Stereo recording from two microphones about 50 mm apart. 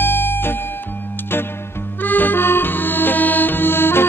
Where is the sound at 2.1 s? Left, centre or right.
Left.